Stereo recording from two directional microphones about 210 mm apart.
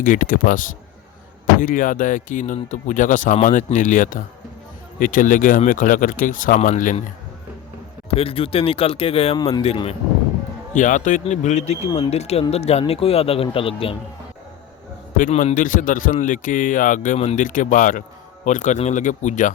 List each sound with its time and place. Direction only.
0.0 s a man's voice: 40° left (ahead or behind)
8.1 s speech: 25° left (ahead or behind)
10.8 s a man's voice: 35° left (ahead or behind)
15.2 s a man's voice: 35° left (ahead or behind)